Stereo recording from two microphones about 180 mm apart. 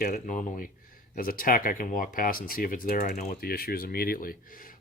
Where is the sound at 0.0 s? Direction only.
50° left (ahead or behind).